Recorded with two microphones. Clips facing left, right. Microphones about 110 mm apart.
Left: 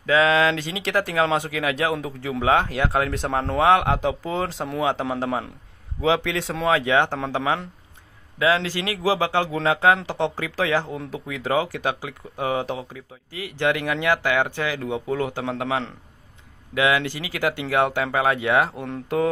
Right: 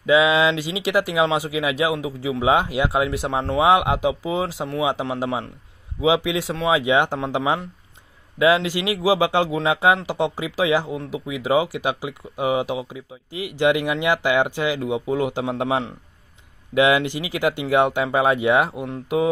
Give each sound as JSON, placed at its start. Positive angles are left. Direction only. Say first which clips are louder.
{"t": 0.0, "sound": "speech", "louder": "right 2 dB", "side_deg": -15}